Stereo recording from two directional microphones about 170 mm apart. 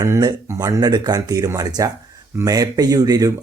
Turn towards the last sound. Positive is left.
turn(degrees=-20)  # may be behind; listen again after turning